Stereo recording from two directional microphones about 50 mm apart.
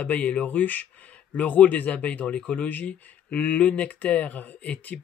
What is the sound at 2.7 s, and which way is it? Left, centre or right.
Speech, left.